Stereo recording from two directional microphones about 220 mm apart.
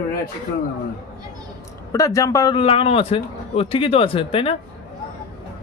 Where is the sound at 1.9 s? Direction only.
15° left (ahead or behind).